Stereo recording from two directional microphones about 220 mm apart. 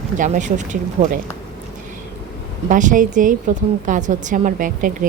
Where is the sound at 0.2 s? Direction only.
35° right (ahead or behind).